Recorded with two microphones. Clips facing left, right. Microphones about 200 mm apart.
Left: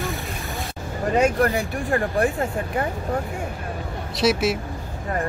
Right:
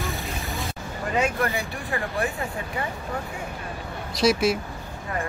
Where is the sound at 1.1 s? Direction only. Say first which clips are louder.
Left 5 dB; 45° left (ahead or behind).